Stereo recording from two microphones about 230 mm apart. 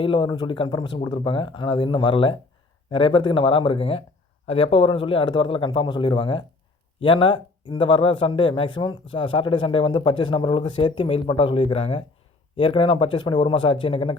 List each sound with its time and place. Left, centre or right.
0.0 s speech: left